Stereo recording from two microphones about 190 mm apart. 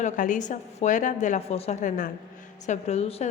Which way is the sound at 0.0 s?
40° left (ahead or behind).